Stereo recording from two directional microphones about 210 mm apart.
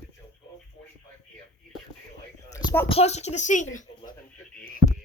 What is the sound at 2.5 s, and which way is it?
Speech, 15° left (ahead or behind).